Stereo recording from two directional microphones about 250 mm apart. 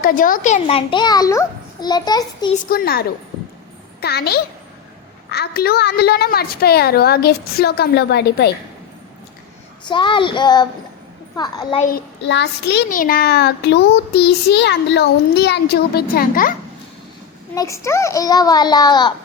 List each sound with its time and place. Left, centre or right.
0.0 s a child's voice: left; by 2.6 s centre
2.6 s a child's voice: left
9.8 s a child's voice: centre
11.9 s a child's voice: left
17.5 s a child's voice: centre